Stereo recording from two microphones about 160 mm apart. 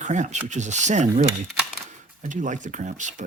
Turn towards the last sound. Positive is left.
turn(degrees=-50)  # may be behind; listen again after turning